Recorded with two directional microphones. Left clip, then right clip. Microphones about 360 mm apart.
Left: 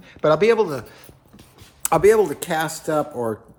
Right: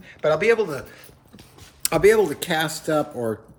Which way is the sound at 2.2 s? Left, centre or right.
Centre.